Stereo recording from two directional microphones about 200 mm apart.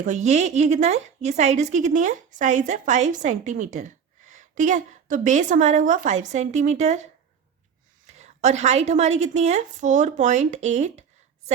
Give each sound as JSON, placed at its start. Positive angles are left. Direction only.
{"t": 0.0, "sound": "a woman's voice", "side_deg": -35}